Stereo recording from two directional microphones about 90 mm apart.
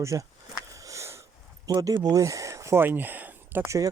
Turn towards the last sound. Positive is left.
turn(degrees=-20)  # may be behind; listen again after turning